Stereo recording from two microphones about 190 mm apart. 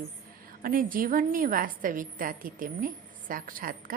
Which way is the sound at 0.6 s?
45° right (ahead or behind).